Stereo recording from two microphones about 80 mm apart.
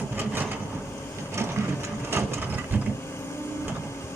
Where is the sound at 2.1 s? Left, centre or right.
Right.